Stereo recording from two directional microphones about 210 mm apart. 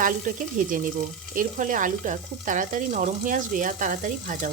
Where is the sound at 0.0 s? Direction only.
40° right (ahead or behind).